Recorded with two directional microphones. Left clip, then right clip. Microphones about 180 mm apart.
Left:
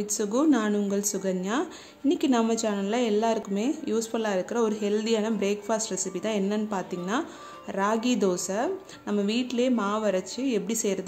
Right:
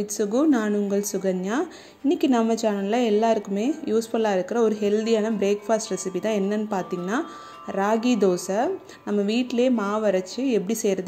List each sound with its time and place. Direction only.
0.0 s speech: 10° right (ahead or behind)